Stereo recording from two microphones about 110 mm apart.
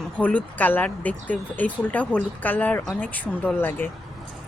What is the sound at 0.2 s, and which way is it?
Speech, 15° left (ahead or behind).